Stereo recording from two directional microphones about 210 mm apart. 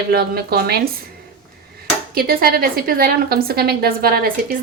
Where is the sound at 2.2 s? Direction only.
45° right (ahead or behind).